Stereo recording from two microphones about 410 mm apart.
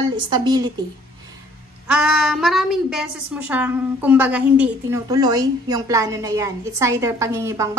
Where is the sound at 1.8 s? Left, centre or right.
Centre.